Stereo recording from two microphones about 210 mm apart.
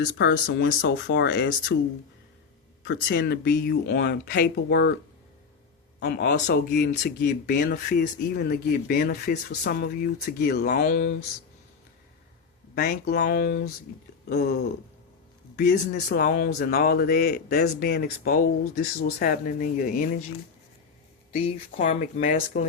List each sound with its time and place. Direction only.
0.0 s speech: 55° left (ahead or behind)
2.8 s speech: 55° left (ahead or behind)
6.0 s speech: 50° left (ahead or behind)
12.7 s speech: 45° left (ahead or behind)
15.5 s speech: 45° left (ahead or behind)
21.3 s speech: 35° left (ahead or behind)